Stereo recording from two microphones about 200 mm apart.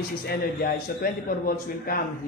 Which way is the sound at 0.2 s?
50° left (ahead or behind).